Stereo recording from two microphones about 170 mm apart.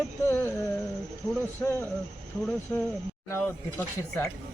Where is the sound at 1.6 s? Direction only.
15° left (ahead or behind).